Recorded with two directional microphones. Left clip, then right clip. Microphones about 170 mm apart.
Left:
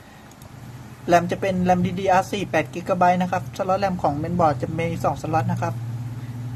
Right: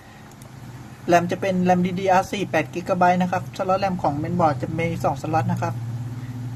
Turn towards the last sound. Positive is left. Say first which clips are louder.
# even
turn(degrees=0)  # may be behind; listen again after turning